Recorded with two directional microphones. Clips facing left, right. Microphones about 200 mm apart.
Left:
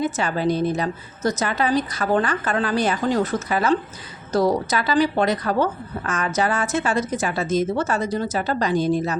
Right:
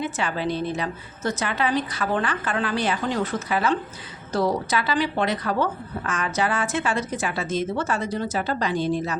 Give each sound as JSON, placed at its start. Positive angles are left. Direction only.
{"t": 0.0, "sound": "a woman's voice", "side_deg": 40}